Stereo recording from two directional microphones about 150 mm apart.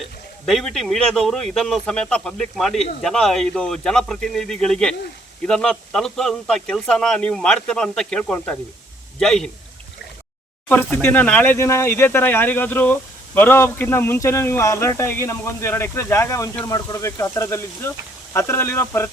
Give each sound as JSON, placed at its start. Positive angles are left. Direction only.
{"t": 0.4, "sound": "speech", "side_deg": 0}
{"t": 10.7, "sound": "speech", "side_deg": 10}